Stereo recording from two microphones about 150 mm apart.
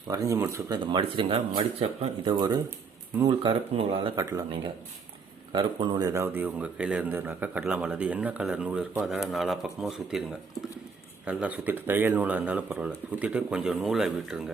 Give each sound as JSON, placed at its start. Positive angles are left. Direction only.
{"t": 0.1, "sound": "speech", "side_deg": -20}
{"t": 0.9, "sound": "speech", "side_deg": -35}
{"t": 4.1, "sound": "a man's voice", "side_deg": -25}
{"t": 11.3, "sound": "speech", "side_deg": -10}